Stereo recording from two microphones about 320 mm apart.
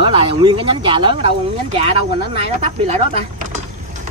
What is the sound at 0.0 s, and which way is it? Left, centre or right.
Speech, centre.